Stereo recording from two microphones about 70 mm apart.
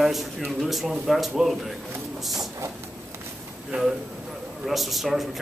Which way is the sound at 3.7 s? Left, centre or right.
Centre.